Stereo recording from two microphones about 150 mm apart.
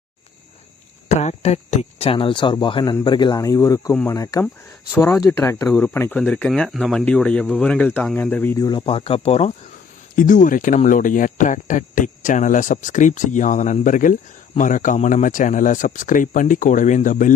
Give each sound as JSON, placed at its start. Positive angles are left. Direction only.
{"t": 1.0, "sound": "speech", "side_deg": 50}
{"t": 8.8, "sound": "speech", "side_deg": 40}
{"t": 10.2, "sound": "speech", "side_deg": 60}